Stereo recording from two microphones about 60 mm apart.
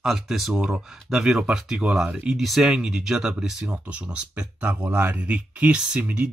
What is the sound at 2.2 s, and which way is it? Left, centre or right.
Speech, centre.